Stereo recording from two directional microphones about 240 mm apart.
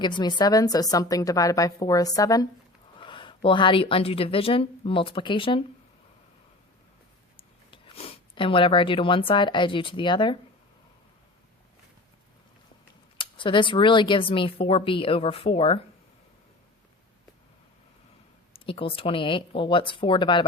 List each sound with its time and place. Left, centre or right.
0.0 s a woman's voice: centre
7.3 s speech: left
13.1 s a woman's voice: centre
18.5 s a woman's voice: left